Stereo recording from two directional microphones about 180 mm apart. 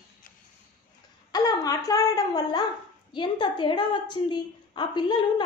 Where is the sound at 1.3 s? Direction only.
20° left (ahead or behind).